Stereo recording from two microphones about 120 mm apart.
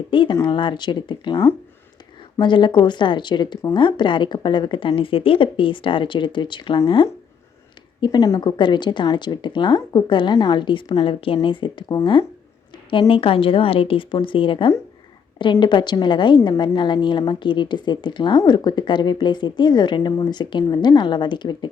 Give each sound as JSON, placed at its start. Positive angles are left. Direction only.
{"t": 0.1, "sound": "a woman's voice", "side_deg": 45}
{"t": 2.4, "sound": "a woman's voice", "side_deg": 40}